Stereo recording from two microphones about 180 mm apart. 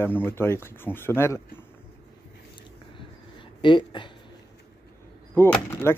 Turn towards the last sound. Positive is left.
turn(degrees=15)  # may be behind; listen again after turning